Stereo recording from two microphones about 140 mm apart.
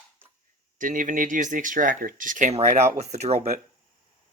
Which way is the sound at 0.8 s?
70° right (ahead or behind).